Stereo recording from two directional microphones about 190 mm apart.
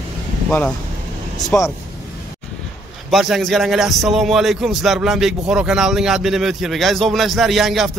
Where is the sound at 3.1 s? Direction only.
Centre (ahead or behind).